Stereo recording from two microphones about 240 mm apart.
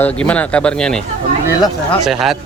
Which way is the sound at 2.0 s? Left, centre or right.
Centre.